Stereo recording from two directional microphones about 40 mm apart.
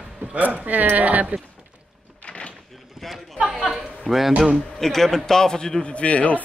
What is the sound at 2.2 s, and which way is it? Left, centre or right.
Door, left.